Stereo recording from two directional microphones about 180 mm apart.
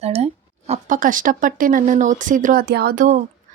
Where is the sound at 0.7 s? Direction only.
45° right (ahead or behind).